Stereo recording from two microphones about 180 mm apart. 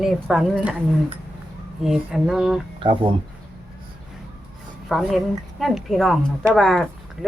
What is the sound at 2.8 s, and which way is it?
Speech, 30° right (ahead or behind).